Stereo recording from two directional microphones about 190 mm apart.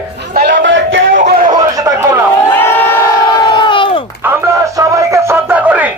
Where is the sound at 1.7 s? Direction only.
15° right (ahead or behind).